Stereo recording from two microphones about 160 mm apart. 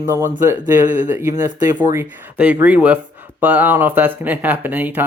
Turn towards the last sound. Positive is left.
turn(degrees=-10)  # may be behind; listen again after turning